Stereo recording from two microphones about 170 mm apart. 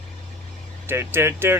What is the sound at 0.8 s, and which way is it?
Speech, 15° right (ahead or behind).